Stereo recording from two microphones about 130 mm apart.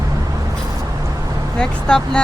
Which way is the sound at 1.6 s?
5° left (ahead or behind).